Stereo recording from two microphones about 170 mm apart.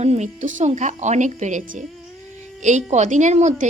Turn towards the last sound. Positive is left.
turn(degrees=-45)  # may be behind; listen again after turning